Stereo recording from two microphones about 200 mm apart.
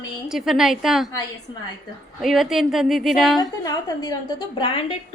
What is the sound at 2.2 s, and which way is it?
Speech, centre (ahead or behind).